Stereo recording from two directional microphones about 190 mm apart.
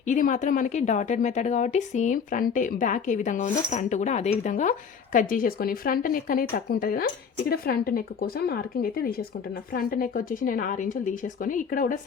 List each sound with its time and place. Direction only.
0.0 s a woman's voice: 40° left (ahead or behind)